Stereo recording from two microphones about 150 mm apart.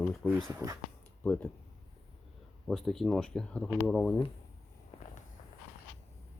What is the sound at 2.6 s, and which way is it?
Speech, centre (ahead or behind).